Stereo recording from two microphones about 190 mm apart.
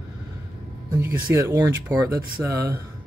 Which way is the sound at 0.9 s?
10° right (ahead or behind).